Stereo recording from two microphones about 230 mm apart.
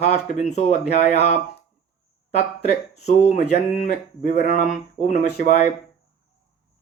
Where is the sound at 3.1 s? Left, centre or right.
Left.